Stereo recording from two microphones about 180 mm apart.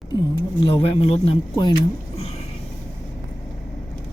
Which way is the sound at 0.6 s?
30° left (ahead or behind).